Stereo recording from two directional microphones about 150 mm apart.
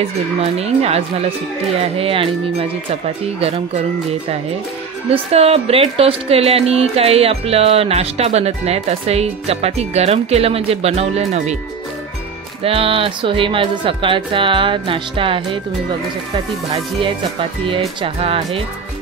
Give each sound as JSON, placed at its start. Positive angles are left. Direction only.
{"t": 0.0, "sound": "speech", "side_deg": -45}
{"t": 3.3, "sound": "speech", "side_deg": -45}
{"t": 5.1, "sound": "speech", "side_deg": -40}
{"t": 12.6, "sound": "speech", "side_deg": -40}
{"t": 17.0, "sound": "speech", "side_deg": -35}